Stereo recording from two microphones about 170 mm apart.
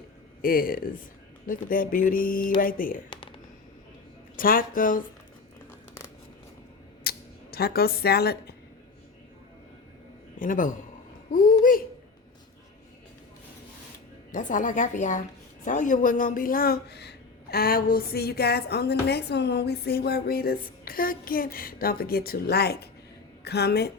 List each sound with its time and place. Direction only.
0.4 s speech: 55° left (ahead or behind)
4.4 s a woman's voice: 55° left (ahead or behind)
7.0 s a sound: 65° left (ahead or behind)
10.3 s a man's voice: 50° left (ahead or behind)
14.3 s a woman's voice: 50° left (ahead or behind); by 23.9 s 75° left (ahead or behind)